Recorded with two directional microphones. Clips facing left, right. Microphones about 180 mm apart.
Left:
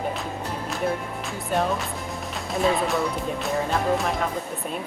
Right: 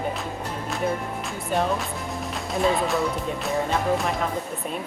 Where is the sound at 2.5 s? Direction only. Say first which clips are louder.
Even; centre (ahead or behind).